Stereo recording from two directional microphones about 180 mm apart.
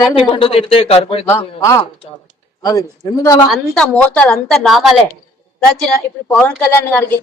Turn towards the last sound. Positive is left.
turn(degrees=10)  # may be behind; listen again after turning